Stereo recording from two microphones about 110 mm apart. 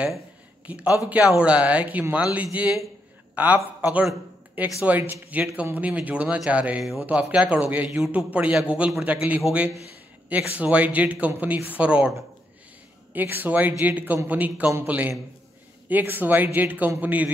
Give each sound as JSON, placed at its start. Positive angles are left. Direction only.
{"t": 0.7, "sound": "a man's voice", "side_deg": -10}
{"t": 7.1, "sound": "a man's voice", "side_deg": -10}